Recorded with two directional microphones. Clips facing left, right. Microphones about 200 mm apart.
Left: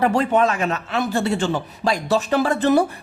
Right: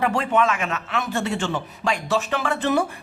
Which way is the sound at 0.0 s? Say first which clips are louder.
Left 3 dB; 35° left (ahead or behind).